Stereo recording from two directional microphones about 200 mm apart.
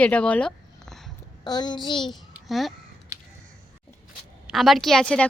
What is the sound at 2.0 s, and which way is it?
Speech, centre (ahead or behind).